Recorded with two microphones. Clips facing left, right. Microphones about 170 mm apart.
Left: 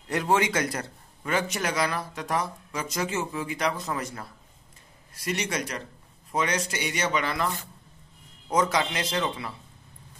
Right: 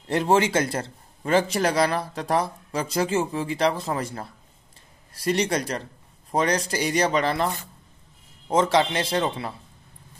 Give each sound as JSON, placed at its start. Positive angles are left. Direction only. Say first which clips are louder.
{"t": 0.1, "sound": "a man's voice", "louder": "right 4 dB", "side_deg": -30}